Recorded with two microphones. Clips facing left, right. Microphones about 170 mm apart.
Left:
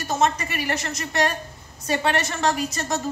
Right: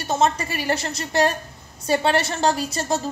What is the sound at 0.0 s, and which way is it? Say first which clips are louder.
Speech: right 2 dB; 30° right (ahead or behind).